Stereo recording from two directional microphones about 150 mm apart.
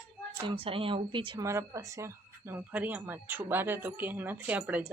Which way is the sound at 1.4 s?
20° right (ahead or behind).